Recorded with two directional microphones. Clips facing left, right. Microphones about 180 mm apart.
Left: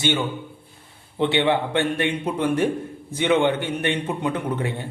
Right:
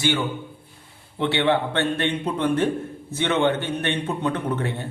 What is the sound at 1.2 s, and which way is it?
A man's voice, 15° left (ahead or behind).